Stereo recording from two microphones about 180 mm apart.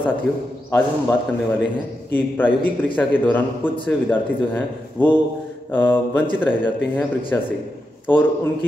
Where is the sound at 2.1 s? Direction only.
10° left (ahead or behind).